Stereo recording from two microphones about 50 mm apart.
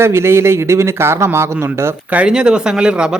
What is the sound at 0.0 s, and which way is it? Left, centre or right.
Speech, right.